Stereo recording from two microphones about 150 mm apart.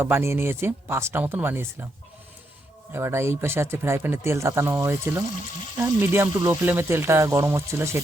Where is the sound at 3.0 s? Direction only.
15° right (ahead or behind).